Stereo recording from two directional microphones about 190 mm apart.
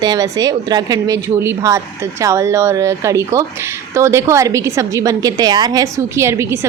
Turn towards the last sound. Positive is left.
turn(degrees=-15)  # may be behind; listen again after turning